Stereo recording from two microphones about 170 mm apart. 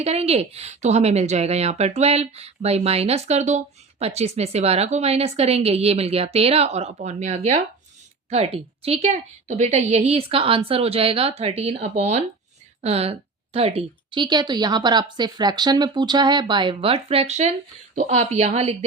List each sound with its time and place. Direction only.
0.0 s a woman's voice: 35° right (ahead or behind)